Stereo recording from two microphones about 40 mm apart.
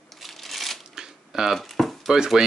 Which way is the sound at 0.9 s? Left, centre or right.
Centre.